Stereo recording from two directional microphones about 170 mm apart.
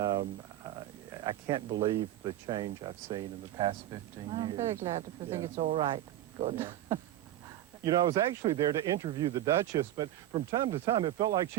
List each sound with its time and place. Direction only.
0.0 s a sound: 25° right (ahead or behind)
1.2 s speech: 25° right (ahead or behind)
4.7 s speech: 15° right (ahead or behind)
5.7 s speech: 30° right (ahead or behind)